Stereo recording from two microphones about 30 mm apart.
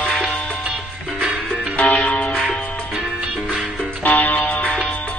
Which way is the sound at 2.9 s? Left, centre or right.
Centre.